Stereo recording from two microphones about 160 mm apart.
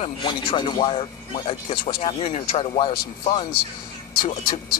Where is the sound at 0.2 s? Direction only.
30° left (ahead or behind).